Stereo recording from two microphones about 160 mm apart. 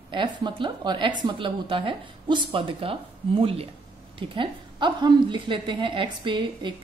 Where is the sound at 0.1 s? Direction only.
30° right (ahead or behind).